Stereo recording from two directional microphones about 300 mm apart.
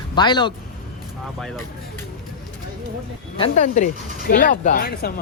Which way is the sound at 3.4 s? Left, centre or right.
Left.